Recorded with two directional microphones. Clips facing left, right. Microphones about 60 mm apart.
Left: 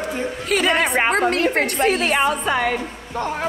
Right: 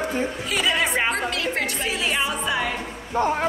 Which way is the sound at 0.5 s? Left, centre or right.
Left.